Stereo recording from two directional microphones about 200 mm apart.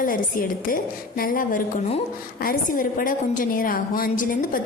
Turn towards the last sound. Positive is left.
turn(degrees=40)  # may be behind; listen again after turning